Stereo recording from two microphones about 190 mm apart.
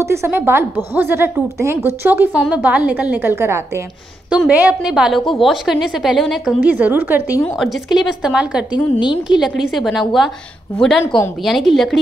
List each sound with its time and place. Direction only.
0.0 s a woman's voice: 15° right (ahead or behind)
8.7 s a woman's voice: 25° left (ahead or behind)
9.3 s a woman's voice: 5° right (ahead or behind)
11.4 s a woman's voice: centre (ahead or behind)